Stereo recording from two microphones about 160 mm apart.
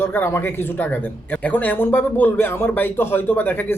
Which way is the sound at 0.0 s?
15° left (ahead or behind).